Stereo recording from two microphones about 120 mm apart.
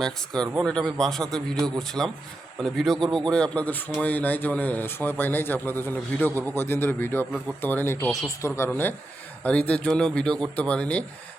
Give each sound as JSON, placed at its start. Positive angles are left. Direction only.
{"t": 0.5, "sound": "a man's voice", "side_deg": 5}
{"t": 8.0, "sound": "a man's voice", "side_deg": 0}
{"t": 8.4, "sound": "speech", "side_deg": 25}